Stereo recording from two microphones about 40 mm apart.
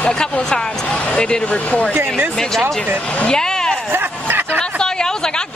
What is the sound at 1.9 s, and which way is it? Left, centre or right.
Speech, right.